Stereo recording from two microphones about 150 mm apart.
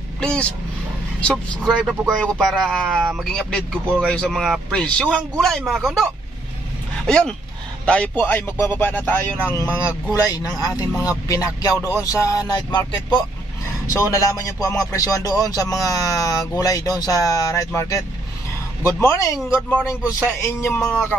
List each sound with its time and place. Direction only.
0.2 s a man's voice: 5° left (ahead or behind)
7.1 s a man's voice: 5° left (ahead or behind)
9.7 s speech: 10° right (ahead or behind)
10.1 s speech: 25° left (ahead or behind)